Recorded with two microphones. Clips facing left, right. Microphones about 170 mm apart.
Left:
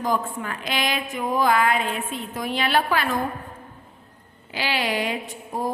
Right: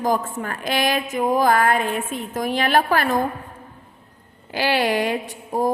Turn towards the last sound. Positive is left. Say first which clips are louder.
# right 6 dB
turn(degrees=-45)  # may be behind; listen again after turning